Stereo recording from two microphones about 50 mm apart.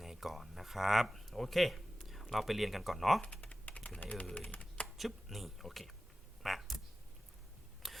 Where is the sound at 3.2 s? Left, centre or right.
Left.